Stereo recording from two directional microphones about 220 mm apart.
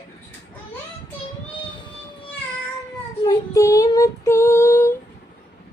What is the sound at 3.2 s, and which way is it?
Female singing, 15° left (ahead or behind).